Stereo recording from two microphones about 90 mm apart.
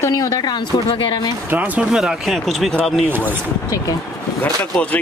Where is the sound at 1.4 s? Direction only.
15° right (ahead or behind).